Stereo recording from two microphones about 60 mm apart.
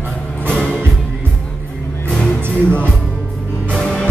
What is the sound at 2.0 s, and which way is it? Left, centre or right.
Music, centre.